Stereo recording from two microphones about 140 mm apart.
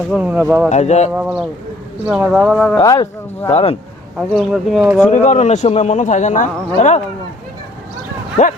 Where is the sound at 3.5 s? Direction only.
45° left (ahead or behind).